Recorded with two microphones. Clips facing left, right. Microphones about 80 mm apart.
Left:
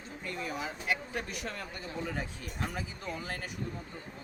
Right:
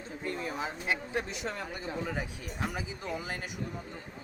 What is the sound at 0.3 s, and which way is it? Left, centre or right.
Speech, right.